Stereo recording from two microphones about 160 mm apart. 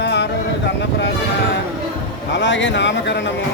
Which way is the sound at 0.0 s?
90° left.